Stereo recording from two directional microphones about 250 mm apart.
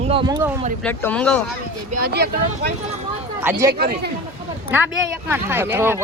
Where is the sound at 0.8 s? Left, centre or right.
Centre.